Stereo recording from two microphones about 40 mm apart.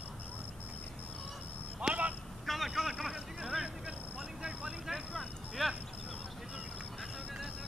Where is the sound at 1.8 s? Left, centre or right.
Right.